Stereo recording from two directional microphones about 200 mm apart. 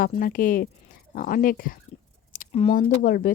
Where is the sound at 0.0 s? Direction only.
45° left (ahead or behind).